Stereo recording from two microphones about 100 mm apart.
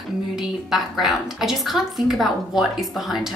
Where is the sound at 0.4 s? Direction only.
5° right (ahead or behind).